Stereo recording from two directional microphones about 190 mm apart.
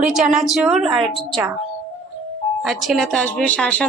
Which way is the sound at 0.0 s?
Centre (ahead or behind).